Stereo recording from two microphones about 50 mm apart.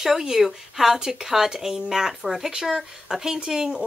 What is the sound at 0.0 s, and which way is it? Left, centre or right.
Speech, centre.